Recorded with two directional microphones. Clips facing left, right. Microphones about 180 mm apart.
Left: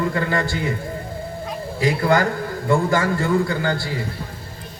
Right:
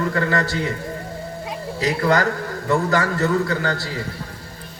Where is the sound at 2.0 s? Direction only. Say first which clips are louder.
Right 1 dB; 30° left (ahead or behind).